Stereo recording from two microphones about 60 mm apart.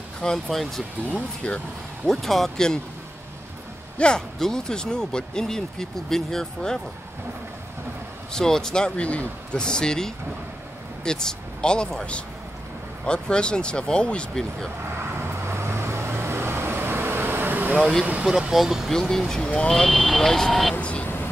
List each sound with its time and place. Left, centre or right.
0.2 s speech: centre
2.0 s speech: centre
4.0 s speech: centre
8.3 s speech: centre
15.0 s vehicle: right
18.5 s speech: centre
18.9 s speech: centre
20.8 s speech: centre